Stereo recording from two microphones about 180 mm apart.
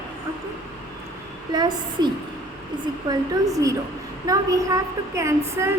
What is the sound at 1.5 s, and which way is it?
A woman's voice, 25° right (ahead or behind).